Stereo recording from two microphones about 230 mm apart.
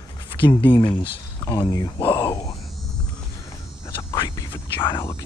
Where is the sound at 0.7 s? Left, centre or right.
Left.